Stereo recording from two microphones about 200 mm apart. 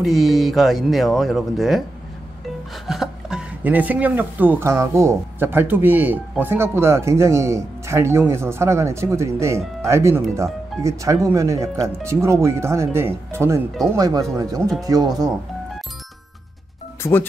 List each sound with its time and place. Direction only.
0.0 s speech: centre (ahead or behind); by 15.2 s 20° right (ahead or behind)
17.0 s speech: 10° left (ahead or behind)